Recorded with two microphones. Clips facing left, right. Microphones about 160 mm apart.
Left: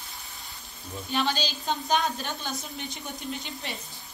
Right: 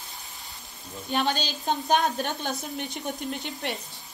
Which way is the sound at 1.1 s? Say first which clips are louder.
Right 1 dB; 50° right (ahead or behind).